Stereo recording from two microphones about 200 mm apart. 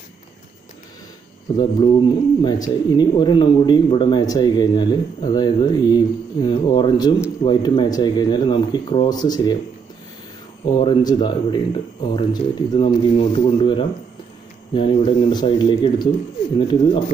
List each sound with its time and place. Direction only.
1.6 s a man's voice: 25° left (ahead or behind)
10.6 s a man's voice: 25° left (ahead or behind)